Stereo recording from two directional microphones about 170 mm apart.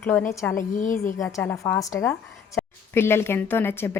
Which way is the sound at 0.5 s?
50° left (ahead or behind).